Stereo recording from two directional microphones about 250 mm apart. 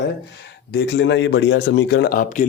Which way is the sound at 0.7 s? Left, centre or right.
Left.